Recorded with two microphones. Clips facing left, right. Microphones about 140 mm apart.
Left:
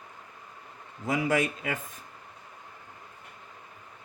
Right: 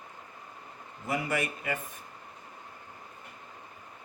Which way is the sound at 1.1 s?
90° left.